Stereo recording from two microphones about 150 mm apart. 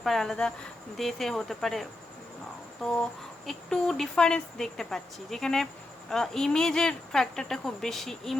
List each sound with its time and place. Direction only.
0.0 s speech: centre (ahead or behind)